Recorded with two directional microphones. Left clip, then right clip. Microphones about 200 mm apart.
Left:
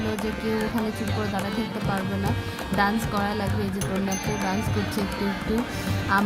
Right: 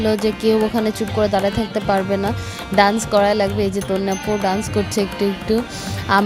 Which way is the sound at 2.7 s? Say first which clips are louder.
Right 10 dB; 35° right (ahead or behind).